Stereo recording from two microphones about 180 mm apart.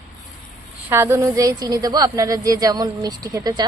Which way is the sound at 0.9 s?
15° right (ahead or behind).